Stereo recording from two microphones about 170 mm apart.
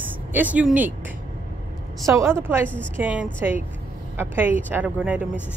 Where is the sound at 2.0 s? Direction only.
15° right (ahead or behind).